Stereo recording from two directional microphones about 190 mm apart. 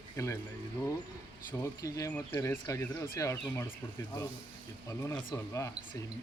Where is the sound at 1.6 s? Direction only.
15° left (ahead or behind).